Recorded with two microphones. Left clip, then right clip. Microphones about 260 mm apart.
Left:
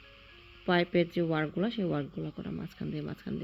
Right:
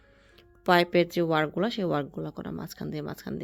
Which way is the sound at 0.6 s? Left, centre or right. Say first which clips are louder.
Right 6 dB; right.